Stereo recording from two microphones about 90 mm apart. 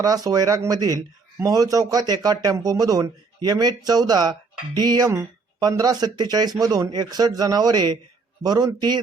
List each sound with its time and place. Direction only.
0.0 s speech: 45° right (ahead or behind)